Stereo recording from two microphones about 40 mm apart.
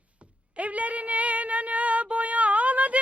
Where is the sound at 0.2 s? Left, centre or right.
Right.